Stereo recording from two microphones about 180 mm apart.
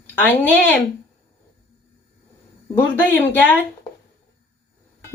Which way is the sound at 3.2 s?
10° left (ahead or behind).